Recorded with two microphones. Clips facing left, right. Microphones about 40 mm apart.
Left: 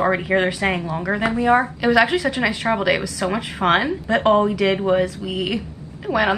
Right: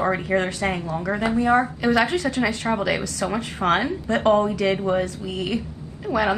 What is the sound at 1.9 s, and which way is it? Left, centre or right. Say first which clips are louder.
Speech: left 4 dB; left.